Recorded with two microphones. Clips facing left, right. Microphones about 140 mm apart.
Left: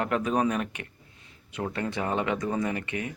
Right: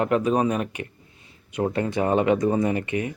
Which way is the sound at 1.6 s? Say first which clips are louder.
Right 7 dB; 25° right (ahead or behind).